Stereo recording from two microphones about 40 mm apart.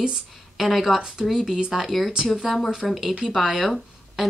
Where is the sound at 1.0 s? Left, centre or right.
Centre.